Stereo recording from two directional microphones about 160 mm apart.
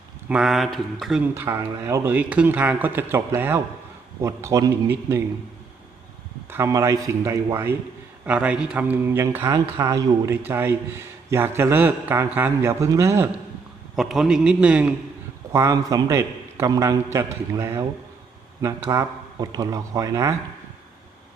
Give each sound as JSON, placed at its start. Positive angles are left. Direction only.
{"t": 0.3, "sound": "a man's voice", "side_deg": -5}
{"t": 1.3, "sound": "a man's voice", "side_deg": -15}
{"t": 6.5, "sound": "a man's voice", "side_deg": -20}
{"t": 13.9, "sound": "a man's voice", "side_deg": 0}
{"t": 15.5, "sound": "a man's voice", "side_deg": -20}